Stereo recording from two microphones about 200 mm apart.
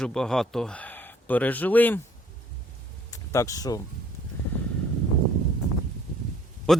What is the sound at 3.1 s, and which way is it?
Speech, 15° left (ahead or behind).